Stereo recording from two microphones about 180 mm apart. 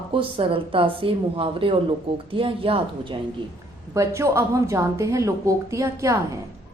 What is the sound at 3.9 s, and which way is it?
Speech, 15° right (ahead or behind).